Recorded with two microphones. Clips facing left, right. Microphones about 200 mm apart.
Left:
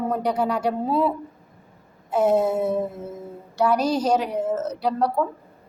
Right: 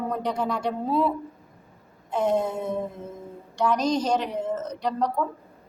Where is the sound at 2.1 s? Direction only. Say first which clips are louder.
Left 5 dB; 5° left (ahead or behind).